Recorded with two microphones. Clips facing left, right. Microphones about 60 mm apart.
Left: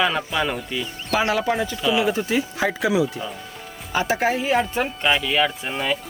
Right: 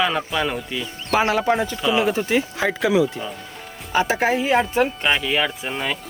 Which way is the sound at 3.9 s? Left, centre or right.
Right.